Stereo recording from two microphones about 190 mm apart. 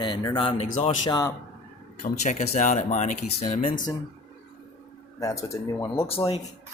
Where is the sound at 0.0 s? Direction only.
25° left (ahead or behind).